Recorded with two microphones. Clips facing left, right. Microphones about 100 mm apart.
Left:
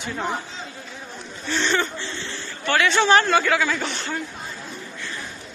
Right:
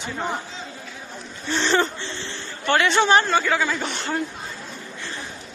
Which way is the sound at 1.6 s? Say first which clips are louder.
Right 3 dB; 30° right (ahead or behind).